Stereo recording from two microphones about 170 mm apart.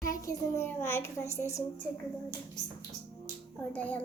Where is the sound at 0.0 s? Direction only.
20° left (ahead or behind).